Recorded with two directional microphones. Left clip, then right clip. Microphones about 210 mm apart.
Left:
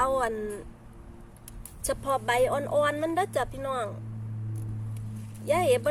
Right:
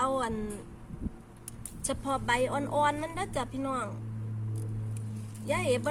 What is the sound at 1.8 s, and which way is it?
A woman's voice, 35° left (ahead or behind).